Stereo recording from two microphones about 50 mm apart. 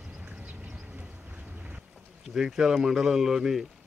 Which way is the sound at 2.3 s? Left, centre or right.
Centre.